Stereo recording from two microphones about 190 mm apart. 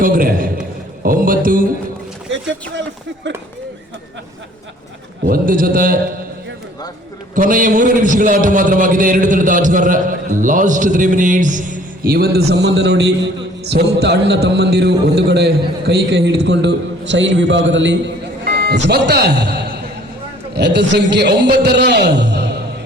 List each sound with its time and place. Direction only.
0.0 s a man's voice: 50° right (ahead or behind)
3.3 s speech: 70° right (ahead or behind)
5.3 s a man's voice: 50° right (ahead or behind)
7.3 s a man's voice: 45° right (ahead or behind); by 18.1 s 70° right (ahead or behind)
18.4 s a man's voice: 50° right (ahead or behind)